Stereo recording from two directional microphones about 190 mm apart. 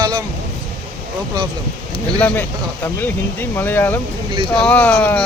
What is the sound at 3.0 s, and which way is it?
Speech, 10° left (ahead or behind).